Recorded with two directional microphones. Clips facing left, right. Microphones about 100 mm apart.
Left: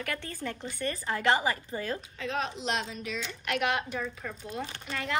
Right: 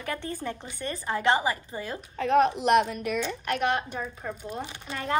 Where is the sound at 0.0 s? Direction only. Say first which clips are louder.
Right 3 dB; 25° right (ahead or behind).